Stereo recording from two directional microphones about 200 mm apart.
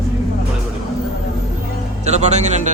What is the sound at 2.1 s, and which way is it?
Speech, 35° right (ahead or behind).